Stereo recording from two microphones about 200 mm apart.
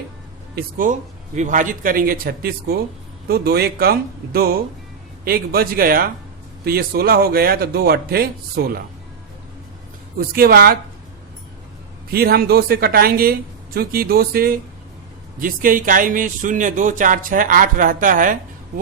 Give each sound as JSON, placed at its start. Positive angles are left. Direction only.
{"t": 0.5, "sound": "speech", "side_deg": -45}
{"t": 10.2, "sound": "speech", "side_deg": -50}
{"t": 12.1, "sound": "speech", "side_deg": -50}